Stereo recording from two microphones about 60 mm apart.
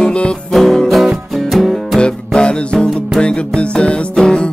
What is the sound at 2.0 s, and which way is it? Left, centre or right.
Music, centre.